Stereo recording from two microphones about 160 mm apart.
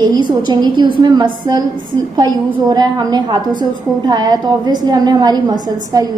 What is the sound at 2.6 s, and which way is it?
A woman's voice, 25° right (ahead or behind).